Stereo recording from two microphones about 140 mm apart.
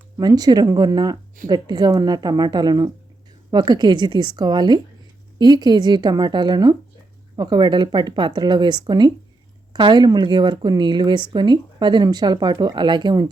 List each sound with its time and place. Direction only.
0.2 s a woman's voice: 30° right (ahead or behind)